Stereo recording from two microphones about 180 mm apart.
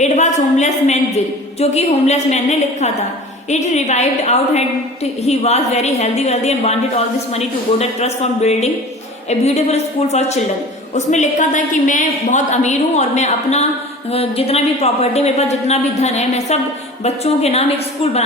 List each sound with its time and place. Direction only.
0.0 s a woman's voice: 40° left (ahead or behind)